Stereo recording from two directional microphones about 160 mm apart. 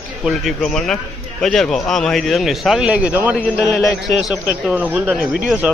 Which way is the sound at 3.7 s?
20° left (ahead or behind).